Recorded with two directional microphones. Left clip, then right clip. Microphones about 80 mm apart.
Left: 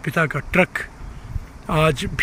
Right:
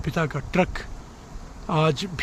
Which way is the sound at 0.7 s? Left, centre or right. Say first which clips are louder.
Left 8 dB; centre.